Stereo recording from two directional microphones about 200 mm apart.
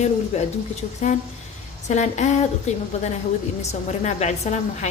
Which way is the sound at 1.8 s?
35° left (ahead or behind).